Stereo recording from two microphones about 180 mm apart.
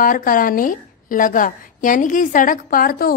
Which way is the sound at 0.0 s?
50° left (ahead or behind).